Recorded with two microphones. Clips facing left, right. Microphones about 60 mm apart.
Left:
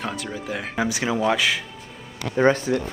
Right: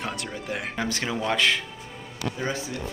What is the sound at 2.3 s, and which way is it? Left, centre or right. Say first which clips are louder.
Speech: left 15 dB; left.